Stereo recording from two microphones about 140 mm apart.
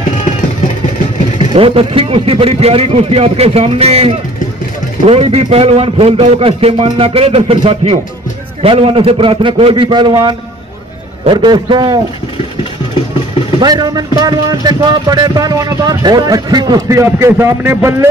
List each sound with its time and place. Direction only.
1.5 s a man's voice: 40° right (ahead or behind)
13.6 s speech: 30° right (ahead or behind)